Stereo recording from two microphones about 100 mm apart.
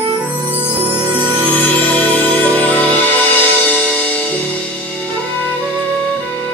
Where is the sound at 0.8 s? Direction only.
15° right (ahead or behind).